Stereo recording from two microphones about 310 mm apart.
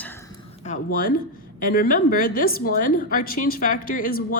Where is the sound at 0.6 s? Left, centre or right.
Left.